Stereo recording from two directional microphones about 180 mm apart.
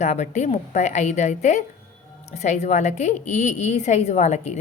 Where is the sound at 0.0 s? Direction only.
40° left (ahead or behind).